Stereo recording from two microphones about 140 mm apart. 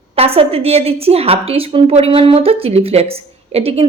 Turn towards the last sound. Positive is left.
turn(degrees=-45)  # may be behind; listen again after turning